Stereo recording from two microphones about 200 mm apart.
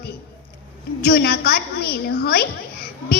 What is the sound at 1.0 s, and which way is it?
A woman's voice, 50° left (ahead or behind).